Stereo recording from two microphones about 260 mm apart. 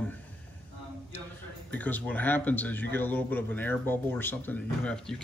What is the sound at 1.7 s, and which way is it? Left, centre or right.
A man's voice, centre.